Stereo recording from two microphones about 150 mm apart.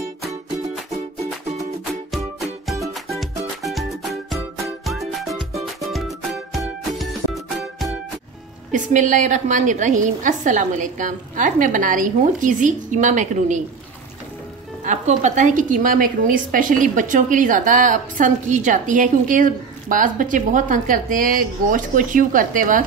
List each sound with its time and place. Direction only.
0.9 s music: 45° right (ahead or behind)
2.0 s music: centre (ahead or behind)
8.7 s a woman's voice: 55° right (ahead or behind)
14.9 s a woman's voice: 55° right (ahead or behind)